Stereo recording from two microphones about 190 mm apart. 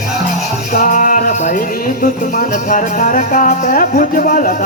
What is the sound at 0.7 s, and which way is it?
Music, 45° left (ahead or behind).